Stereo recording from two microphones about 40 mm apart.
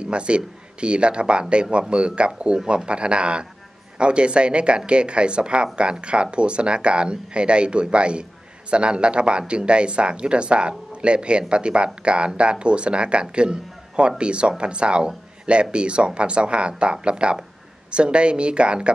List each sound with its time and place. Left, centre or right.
0.0 s a man's voice: right